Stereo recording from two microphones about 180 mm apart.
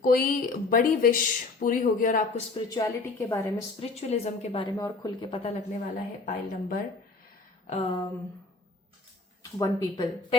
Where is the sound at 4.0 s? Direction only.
35° left (ahead or behind).